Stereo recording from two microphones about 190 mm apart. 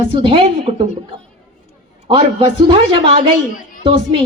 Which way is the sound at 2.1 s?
25° right (ahead or behind).